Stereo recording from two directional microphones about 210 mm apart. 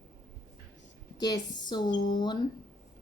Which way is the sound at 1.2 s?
20° left (ahead or behind).